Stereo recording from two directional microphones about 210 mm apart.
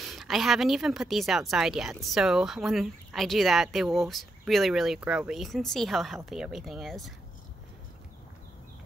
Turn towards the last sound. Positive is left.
turn(degrees=0)  # may be behind; listen again after turning